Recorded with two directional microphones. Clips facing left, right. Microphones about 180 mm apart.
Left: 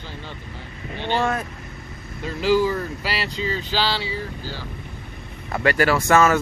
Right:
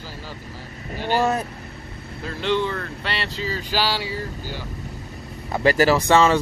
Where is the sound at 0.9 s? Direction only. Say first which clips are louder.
Right 2 dB; 5° right (ahead or behind).